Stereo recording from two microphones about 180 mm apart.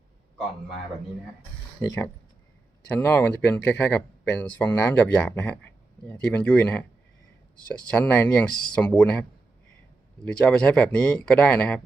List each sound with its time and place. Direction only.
1.8 s speech: 20° left (ahead or behind)
3.0 s speech: 10° left (ahead or behind)
10.2 s speech: 5° left (ahead or behind)